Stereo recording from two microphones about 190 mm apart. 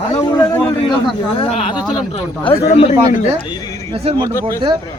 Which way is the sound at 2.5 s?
30° left (ahead or behind).